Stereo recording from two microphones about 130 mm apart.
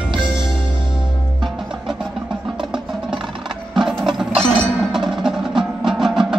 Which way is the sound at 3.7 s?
5° right (ahead or behind).